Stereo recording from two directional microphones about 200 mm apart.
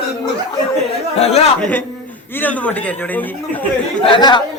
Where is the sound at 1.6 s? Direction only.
10° left (ahead or behind).